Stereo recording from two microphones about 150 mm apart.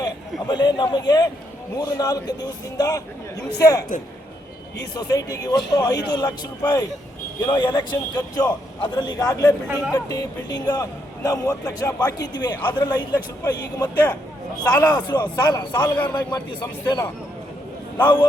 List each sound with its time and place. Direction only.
0.0 s a man's voice: 30° left (ahead or behind)
4.9 s a man's voice: 25° left (ahead or behind)
9.6 s speech: 10° right (ahead or behind)
9.9 s a man's voice: 25° left (ahead or behind)
18.0 s a man's voice: 30° left (ahead or behind)